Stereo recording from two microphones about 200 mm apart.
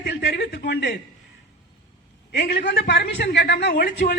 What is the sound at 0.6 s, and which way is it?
Speech, 60° left (ahead or behind).